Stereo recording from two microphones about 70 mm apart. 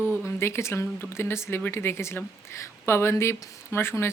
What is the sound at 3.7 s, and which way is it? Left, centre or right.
Speech, left.